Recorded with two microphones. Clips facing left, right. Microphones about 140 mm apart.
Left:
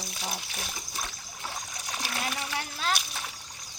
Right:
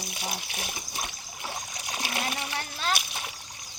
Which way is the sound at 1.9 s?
15° right (ahead or behind).